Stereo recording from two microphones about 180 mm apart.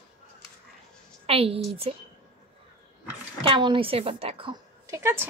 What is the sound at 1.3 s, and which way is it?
Speech, 30° right (ahead or behind).